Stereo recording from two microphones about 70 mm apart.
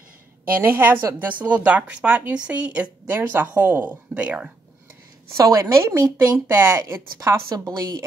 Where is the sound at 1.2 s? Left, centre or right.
Right.